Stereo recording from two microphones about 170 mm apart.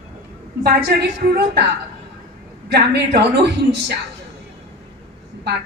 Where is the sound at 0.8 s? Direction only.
75° right (ahead or behind).